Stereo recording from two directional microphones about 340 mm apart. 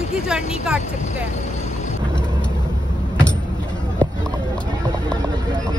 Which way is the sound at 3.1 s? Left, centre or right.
Centre.